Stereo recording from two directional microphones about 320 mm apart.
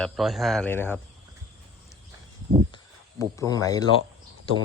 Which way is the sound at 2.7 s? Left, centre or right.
Centre.